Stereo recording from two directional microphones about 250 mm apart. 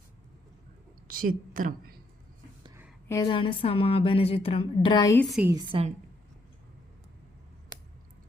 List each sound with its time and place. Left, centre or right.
1.0 s a woman's voice: right
3.1 s a woman's voice: centre
5.3 s a woman's voice: centre